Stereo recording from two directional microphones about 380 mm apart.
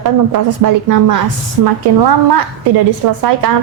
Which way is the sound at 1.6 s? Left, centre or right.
Right.